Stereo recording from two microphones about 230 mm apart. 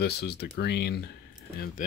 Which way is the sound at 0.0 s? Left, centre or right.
Left.